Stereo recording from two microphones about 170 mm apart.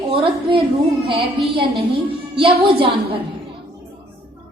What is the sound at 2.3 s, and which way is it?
Speech, 30° right (ahead or behind).